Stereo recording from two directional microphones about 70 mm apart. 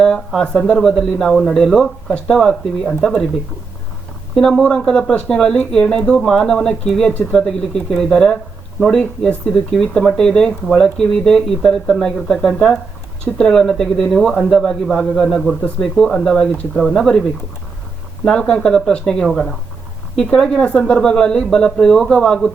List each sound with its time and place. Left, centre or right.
0.3 s speech: centre
4.6 s speech: centre
18.3 s speech: centre
19.2 s speech: centre